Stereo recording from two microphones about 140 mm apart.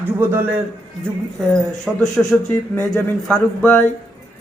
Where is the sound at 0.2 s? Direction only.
15° right (ahead or behind).